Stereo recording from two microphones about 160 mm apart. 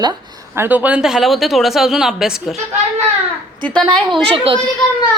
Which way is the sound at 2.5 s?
45° right (ahead or behind).